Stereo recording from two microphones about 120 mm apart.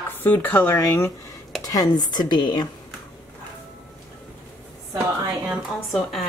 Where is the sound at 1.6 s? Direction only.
30° left (ahead or behind).